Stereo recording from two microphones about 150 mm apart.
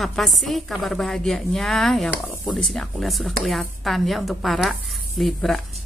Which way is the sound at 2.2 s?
20° left (ahead or behind).